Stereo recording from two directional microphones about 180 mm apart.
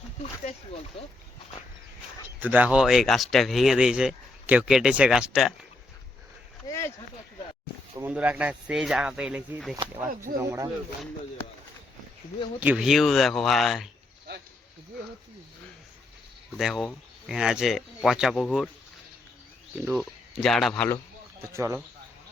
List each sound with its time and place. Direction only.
0.9 s speech: 30° left (ahead or behind)
2.4 s speech: 10° right (ahead or behind)
6.7 s speech: 15° left (ahead or behind)
7.9 s speech: 10° right (ahead or behind)
10.3 s speech: 15° right (ahead or behind)
12.5 s speech: 5° right (ahead or behind)
16.6 s speech: centre (ahead or behind)
20.0 s speech: centre (ahead or behind)
21.5 s speech: 15° right (ahead or behind)